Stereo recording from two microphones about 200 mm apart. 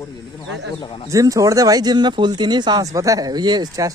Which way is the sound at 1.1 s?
15° right (ahead or behind).